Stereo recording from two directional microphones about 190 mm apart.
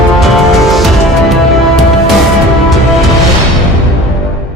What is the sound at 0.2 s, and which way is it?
Music, centre (ahead or behind).